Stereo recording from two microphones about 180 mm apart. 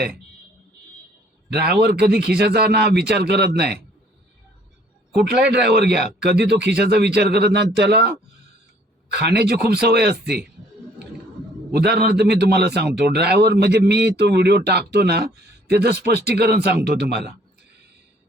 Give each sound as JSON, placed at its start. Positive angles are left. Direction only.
{"t": 1.5, "sound": "speech", "side_deg": -65}
{"t": 5.1, "sound": "speech", "side_deg": -65}
{"t": 9.1, "sound": "speech", "side_deg": -65}
{"t": 11.7, "sound": "a man's voice", "side_deg": -65}